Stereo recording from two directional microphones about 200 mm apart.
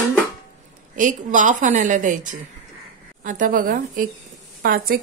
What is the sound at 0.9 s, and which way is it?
A woman's voice, 40° right (ahead or behind).